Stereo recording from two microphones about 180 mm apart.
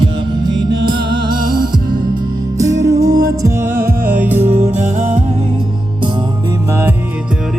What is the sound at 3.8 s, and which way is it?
Music, 50° right (ahead or behind).